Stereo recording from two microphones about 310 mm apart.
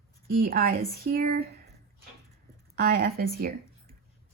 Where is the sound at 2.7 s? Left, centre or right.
Right.